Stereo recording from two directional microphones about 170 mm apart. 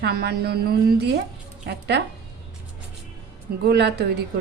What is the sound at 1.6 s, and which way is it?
Speech, 85° right.